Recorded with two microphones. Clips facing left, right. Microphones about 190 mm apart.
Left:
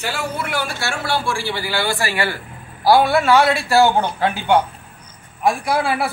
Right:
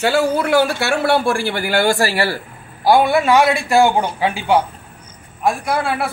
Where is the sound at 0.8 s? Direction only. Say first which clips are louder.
Right 7 dB; 60° right (ahead or behind); by 2.4 s 35° right (ahead or behind).